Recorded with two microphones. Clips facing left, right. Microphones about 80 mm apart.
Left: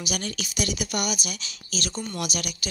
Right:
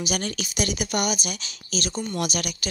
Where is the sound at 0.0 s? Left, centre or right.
Right.